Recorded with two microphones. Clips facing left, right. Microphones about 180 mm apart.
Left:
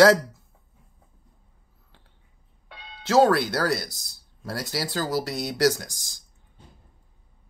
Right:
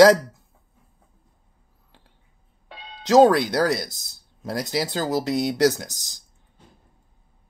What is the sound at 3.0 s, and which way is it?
Speech, 20° right (ahead or behind).